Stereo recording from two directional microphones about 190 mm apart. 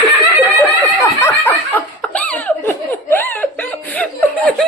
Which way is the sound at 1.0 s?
15° left (ahead or behind).